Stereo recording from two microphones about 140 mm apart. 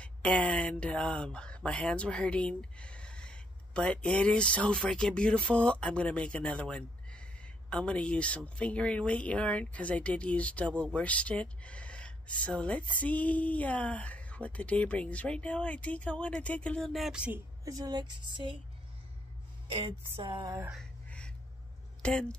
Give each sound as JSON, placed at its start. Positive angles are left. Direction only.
{"t": 0.0, "sound": "speech", "side_deg": 10}
{"t": 17.6, "sound": "speech", "side_deg": -25}
{"t": 20.2, "sound": "speech", "side_deg": -25}
{"t": 22.0, "sound": "speech", "side_deg": 5}